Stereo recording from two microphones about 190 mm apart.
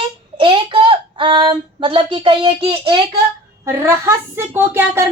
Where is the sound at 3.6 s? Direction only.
15° right (ahead or behind).